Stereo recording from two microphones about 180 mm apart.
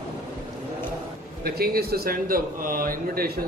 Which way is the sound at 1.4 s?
55° right (ahead or behind).